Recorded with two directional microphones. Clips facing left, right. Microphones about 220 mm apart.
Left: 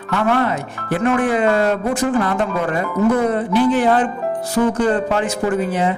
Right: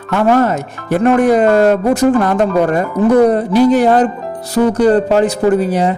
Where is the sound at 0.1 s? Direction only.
40° right (ahead or behind).